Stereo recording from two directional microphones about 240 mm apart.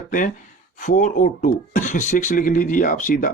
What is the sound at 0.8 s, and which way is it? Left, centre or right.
Speech, left.